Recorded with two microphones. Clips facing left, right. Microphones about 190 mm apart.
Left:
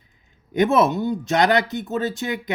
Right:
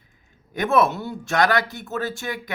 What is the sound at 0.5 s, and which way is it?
Speech, 20° left (ahead or behind).